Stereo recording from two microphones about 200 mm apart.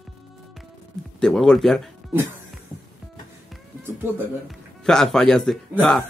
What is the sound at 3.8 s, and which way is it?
Speech, 10° right (ahead or behind).